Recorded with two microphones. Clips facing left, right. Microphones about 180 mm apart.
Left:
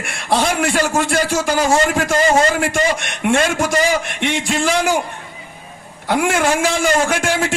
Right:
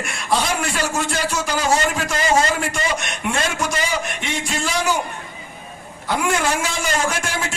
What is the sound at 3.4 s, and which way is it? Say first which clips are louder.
Speech: left 6 dB; 45° left (ahead or behind).